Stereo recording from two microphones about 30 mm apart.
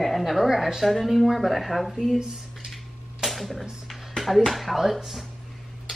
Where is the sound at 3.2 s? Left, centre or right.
Centre.